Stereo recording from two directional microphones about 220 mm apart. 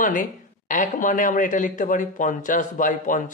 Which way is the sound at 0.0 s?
35° left (ahead or behind).